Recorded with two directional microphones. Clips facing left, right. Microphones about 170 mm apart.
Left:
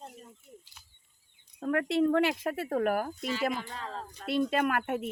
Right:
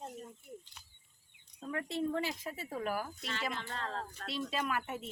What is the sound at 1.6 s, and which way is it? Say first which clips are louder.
Speech: left 10 dB; 70° left (ahead or behind).